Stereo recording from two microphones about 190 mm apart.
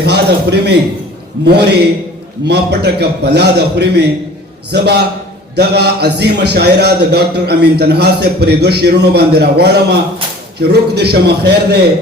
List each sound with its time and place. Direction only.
0.0 s a man's voice: 60° right (ahead or behind)